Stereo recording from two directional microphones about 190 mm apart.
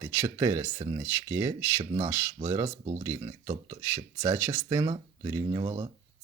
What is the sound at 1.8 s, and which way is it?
Speech, 25° right (ahead or behind).